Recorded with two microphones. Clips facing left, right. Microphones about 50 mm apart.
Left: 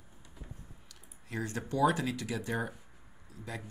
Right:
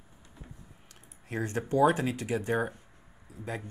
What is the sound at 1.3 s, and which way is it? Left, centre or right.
Speech, right.